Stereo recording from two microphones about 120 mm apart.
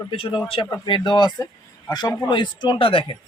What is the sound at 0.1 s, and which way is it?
Speech, 50° left (ahead or behind).